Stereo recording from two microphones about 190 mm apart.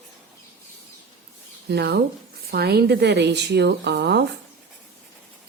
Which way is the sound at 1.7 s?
60° right (ahead or behind).